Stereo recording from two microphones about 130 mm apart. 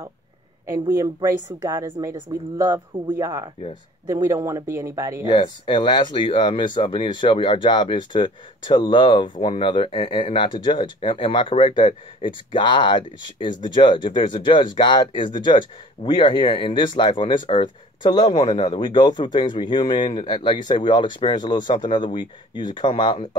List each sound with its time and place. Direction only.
0.7 s a woman's voice: 20° right (ahead or behind)
5.3 s speech: 35° left (ahead or behind)